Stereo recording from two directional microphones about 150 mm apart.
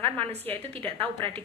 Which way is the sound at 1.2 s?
35° right (ahead or behind).